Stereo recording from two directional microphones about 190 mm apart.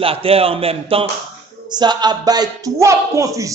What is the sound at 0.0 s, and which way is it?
A man's voice, 30° right (ahead or behind).